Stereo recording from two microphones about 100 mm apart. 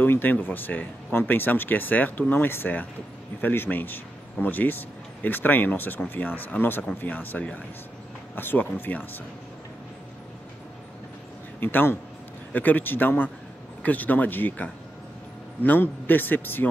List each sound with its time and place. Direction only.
0.0 s speech: 20° left (ahead or behind)
11.6 s speech: 20° left (ahead or behind)